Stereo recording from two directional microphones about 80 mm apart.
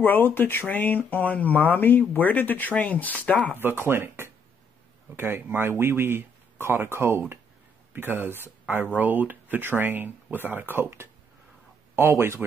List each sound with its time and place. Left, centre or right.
0.0 s speech: left
3.5 s speech: right